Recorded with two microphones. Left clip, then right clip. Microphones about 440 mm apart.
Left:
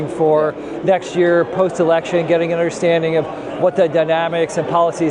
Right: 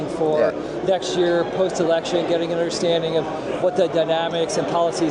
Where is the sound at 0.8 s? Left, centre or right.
Left.